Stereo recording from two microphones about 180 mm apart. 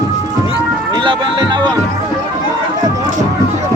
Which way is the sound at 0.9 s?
25° right (ahead or behind).